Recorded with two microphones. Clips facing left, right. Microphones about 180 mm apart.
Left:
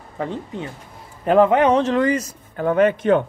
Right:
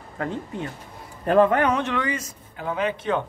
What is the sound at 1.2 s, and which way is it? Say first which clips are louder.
Speech: left 4 dB; 20° left (ahead or behind).